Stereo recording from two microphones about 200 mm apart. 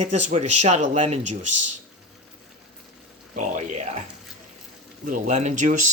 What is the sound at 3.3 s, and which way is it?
Speech, 40° right (ahead or behind).